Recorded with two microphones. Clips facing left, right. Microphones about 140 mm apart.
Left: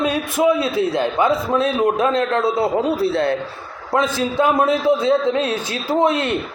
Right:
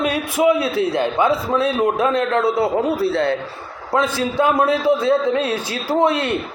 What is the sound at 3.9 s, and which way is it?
A man's voice, 5° right (ahead or behind).